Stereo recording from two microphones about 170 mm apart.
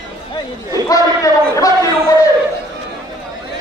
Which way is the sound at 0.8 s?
20° left (ahead or behind).